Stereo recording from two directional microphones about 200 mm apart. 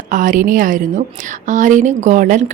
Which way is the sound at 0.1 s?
40° right (ahead or behind).